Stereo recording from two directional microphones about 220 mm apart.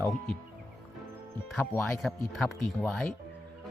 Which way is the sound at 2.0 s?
Centre (ahead or behind).